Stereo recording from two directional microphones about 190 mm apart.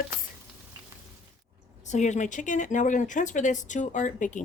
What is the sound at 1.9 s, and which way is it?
Speech, 40° left (ahead or behind).